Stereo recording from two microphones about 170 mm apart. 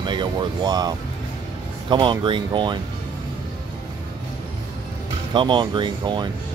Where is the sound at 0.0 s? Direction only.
30° right (ahead or behind).